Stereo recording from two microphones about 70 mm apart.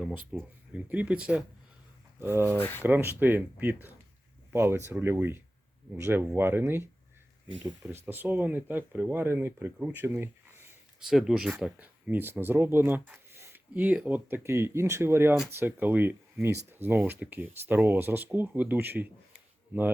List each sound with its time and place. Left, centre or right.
0.3 s speech: centre
2.1 s speech: right
2.6 s speech: left
2.8 s speech: right
8.0 s speech: right
9.9 s a sound: right
11.0 s speech: centre
11.8 s speech: right
13.7 s speech: right
14.3 s speech: right